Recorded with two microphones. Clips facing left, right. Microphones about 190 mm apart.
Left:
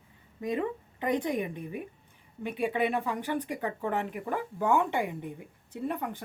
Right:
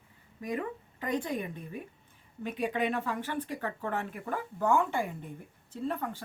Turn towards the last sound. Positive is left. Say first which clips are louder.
# left 1 dB
turn(degrees=15)  # may be behind; listen again after turning